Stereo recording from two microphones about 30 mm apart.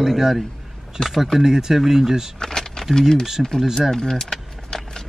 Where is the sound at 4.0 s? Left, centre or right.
Centre.